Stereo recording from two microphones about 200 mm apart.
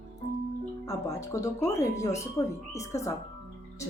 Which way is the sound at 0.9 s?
15° left (ahead or behind).